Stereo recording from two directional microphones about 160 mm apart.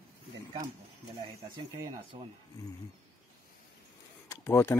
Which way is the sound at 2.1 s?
30° right (ahead or behind).